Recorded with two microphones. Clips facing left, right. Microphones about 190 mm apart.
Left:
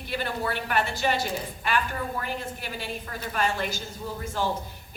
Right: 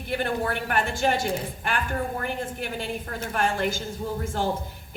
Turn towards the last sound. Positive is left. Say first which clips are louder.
# right 2 dB
turn(degrees=-50)  # may be behind; listen again after turning